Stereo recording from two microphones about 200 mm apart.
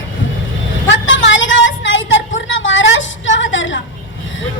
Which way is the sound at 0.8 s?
65° left (ahead or behind).